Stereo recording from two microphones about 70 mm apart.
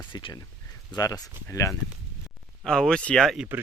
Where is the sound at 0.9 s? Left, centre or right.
Left.